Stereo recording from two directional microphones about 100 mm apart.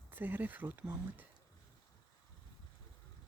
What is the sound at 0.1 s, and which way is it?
Speech, 20° right (ahead or behind).